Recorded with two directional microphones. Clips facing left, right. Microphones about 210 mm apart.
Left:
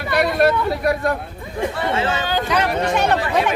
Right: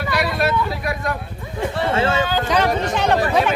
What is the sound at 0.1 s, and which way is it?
Vehicle, 50° left (ahead or behind).